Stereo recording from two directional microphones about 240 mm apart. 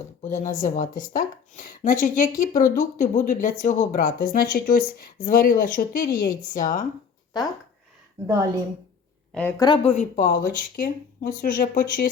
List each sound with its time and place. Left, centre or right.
0.2 s a woman's voice: left
9.3 s a woman's voice: centre
9.6 s a woman's voice: left